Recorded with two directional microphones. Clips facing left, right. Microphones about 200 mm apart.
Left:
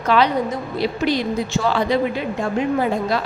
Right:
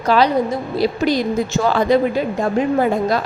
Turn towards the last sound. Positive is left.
turn(degrees=-45)  # may be behind; listen again after turning